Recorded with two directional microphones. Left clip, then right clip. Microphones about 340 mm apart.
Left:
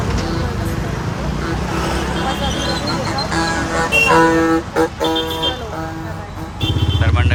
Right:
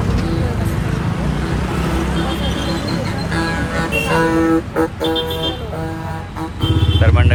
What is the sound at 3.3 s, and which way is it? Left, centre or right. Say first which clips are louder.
Music: left 1 dB; centre.